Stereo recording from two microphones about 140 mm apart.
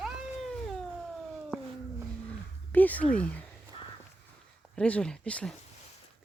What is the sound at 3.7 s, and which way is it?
Walk, 45° left (ahead or behind).